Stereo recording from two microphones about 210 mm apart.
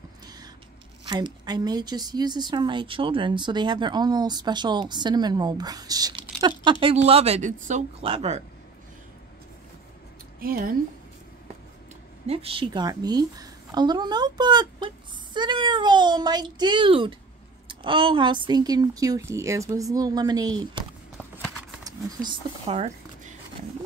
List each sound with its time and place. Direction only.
1.0 s a woman's voice: 20° right (ahead or behind)
10.4 s a woman's voice: 45° right (ahead or behind)
12.3 s a woman's voice: 25° right (ahead or behind)
21.8 s speech: 20° right (ahead or behind)